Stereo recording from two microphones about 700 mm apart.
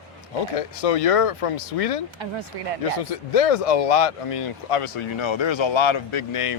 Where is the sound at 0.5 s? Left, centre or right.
Left.